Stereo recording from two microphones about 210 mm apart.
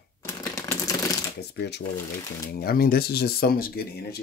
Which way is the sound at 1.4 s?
50° left (ahead or behind).